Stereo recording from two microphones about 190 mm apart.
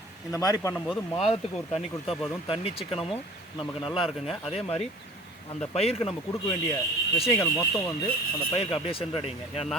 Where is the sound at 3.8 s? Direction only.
25° left (ahead or behind).